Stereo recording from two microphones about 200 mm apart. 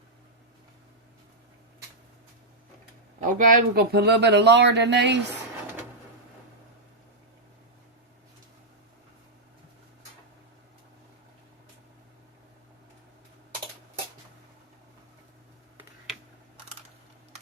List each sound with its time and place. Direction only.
3.2 s speech: 40° right (ahead or behind); by 5.2 s 60° right (ahead or behind)